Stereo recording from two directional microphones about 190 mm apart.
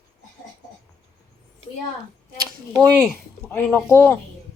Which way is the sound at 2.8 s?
5° left (ahead or behind).